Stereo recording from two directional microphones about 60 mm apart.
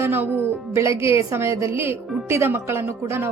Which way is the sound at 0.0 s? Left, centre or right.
Right.